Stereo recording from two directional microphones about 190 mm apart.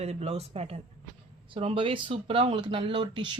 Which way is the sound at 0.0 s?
35° right (ahead or behind).